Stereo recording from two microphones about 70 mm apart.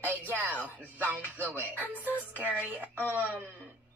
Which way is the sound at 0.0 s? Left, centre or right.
Right.